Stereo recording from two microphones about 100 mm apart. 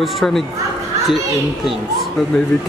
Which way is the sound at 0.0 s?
Centre (ahead or behind).